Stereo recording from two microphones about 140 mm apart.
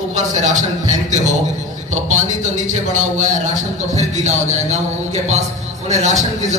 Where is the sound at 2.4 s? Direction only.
60° right (ahead or behind).